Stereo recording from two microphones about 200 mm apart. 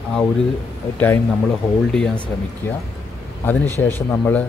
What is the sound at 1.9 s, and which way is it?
Speech, 5° left (ahead or behind).